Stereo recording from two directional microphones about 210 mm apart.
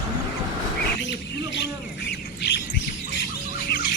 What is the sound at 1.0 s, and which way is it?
Bird, 55° left (ahead or behind).